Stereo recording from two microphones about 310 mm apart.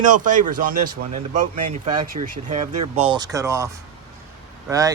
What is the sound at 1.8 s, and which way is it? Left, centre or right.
A man's voice, right.